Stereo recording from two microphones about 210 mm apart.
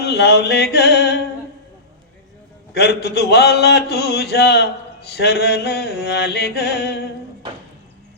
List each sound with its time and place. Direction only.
0.0 s a man's voice: 50° left (ahead or behind)
2.7 s a man's voice: 50° left (ahead or behind)